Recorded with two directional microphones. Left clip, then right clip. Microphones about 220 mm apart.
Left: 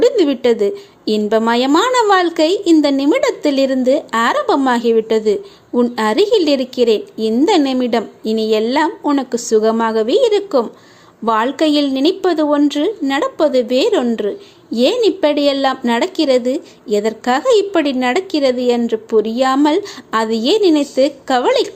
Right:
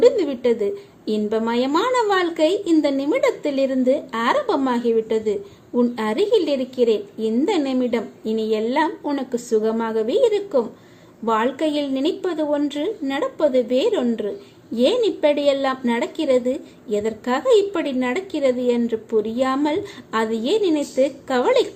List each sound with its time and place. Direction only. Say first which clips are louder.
0.0 s a woman's voice: left 4 dB; 15° left (ahead or behind)